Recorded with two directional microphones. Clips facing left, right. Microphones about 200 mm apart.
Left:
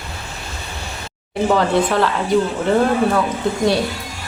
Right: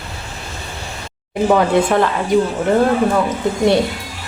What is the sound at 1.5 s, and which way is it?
Speech, 15° right (ahead or behind).